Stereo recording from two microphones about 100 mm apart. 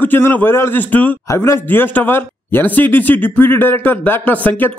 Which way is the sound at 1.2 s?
30° left (ahead or behind).